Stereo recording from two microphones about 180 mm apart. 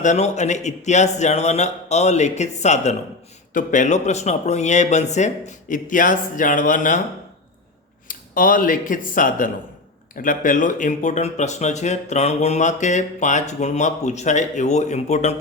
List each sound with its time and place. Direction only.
0.0 s speech: 40° left (ahead or behind)
8.0 s speech: 50° left (ahead or behind)